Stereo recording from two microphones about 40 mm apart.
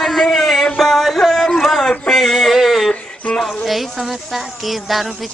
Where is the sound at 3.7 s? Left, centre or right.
Centre.